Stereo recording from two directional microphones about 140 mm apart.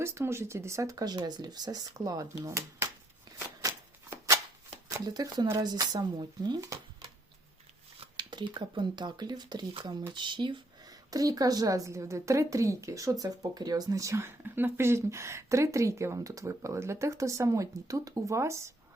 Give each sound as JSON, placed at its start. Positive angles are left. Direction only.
{"t": 0.0, "sound": "a woman's voice", "side_deg": -20}
{"t": 3.3, "sound": "shuffling cards", "side_deg": -20}
{"t": 4.9, "sound": "a woman's voice", "side_deg": -30}